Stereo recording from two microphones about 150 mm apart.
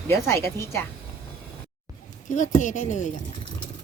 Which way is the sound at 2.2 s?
60° left (ahead or behind).